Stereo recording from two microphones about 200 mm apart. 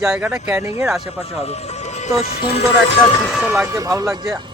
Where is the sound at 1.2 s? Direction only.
30° left (ahead or behind).